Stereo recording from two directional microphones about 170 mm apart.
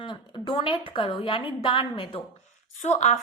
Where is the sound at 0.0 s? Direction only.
30° left (ahead or behind).